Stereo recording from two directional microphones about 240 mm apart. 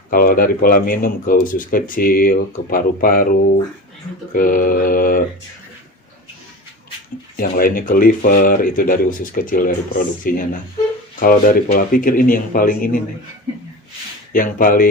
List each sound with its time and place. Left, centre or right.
0.1 s speech: left
4.4 s speech: left
7.3 s speech: left
14.3 s speech: left